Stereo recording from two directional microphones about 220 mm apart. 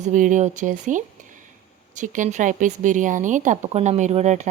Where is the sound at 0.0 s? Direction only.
35° right (ahead or behind).